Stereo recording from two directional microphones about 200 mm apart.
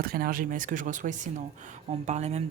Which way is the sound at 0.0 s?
50° right (ahead or behind).